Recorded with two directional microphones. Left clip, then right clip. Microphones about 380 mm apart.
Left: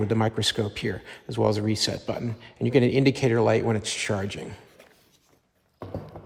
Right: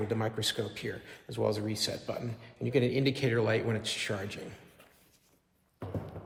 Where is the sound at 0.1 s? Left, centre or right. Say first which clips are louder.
Left 7 dB; centre.